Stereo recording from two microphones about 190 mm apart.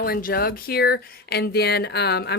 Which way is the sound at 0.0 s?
50° left (ahead or behind).